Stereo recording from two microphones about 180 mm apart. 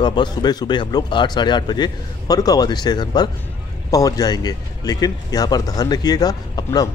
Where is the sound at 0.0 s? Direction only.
25° left (ahead or behind).